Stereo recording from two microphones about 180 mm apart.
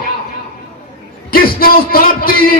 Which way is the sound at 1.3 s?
55° left (ahead or behind).